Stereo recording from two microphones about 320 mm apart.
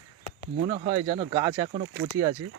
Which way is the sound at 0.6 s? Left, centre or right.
Centre.